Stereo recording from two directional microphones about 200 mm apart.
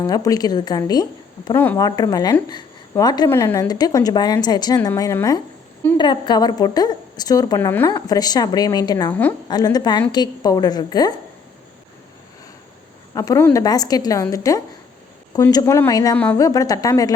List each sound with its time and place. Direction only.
0.0 s a woman's voice: 20° left (ahead or behind)
13.1 s a woman's voice: 15° left (ahead or behind)
16.1 s a woman's voice: 10° left (ahead or behind)